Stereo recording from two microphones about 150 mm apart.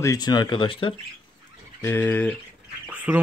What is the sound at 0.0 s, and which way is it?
Speech, 25° left (ahead or behind).